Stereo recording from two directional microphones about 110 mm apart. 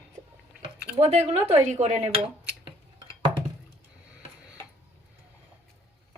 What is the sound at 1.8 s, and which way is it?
Speech, 90° right.